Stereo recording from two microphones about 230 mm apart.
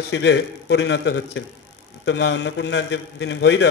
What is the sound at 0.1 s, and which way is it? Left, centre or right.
A man's voice, left.